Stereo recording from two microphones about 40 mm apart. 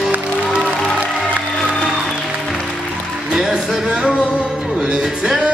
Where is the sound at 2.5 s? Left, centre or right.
Centre.